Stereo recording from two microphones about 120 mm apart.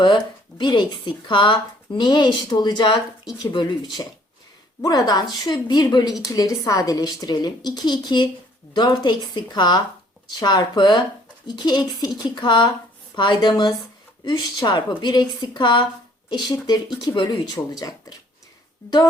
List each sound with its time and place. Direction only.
0.6 s a woman's voice: 35° left (ahead or behind)